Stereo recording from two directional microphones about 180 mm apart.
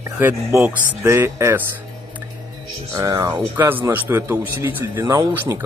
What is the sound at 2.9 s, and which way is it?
A man's voice, 15° right (ahead or behind).